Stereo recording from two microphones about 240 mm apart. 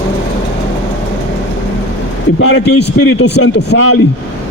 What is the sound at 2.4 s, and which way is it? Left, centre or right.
Speech, left.